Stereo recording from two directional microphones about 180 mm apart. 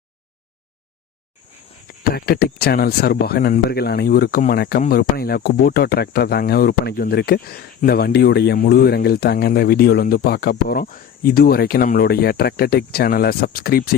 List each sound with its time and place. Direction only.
2.0 s speech: 60° left (ahead or behind)